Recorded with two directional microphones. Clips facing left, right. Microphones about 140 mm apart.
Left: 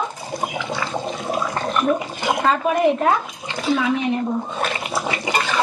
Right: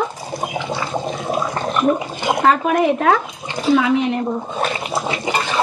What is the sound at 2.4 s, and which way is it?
Speech, 70° right (ahead or behind).